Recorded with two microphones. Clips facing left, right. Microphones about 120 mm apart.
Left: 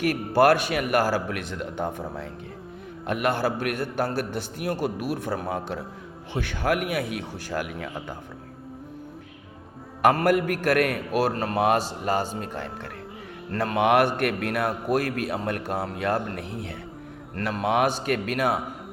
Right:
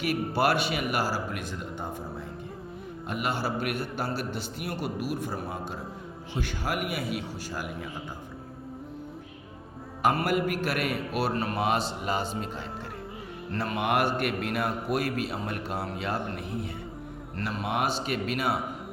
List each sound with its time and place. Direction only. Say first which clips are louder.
0.0 s a man's voice: left 6 dB; 50° left (ahead or behind); by 2.2 s 75° left (ahead or behind)
3.1 s a man's voice: left 6 dB; 60° left (ahead or behind)
5.1 s a man's voice: left 4 dB; 75° left (ahead or behind)
6.3 s a man's voice: left 6 dB; 55° left (ahead or behind)
10.2 s a man's voice: left 5 dB; 55° left (ahead or behind)
13.7 s a man's voice: left 6 dB; 65° left (ahead or behind)